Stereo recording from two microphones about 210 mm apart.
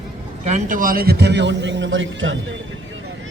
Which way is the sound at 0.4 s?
35° right (ahead or behind).